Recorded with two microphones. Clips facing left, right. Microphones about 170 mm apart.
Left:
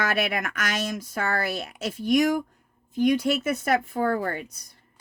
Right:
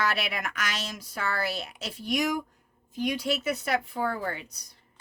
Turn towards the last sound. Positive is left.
turn(degrees=50)  # may be behind; listen again after turning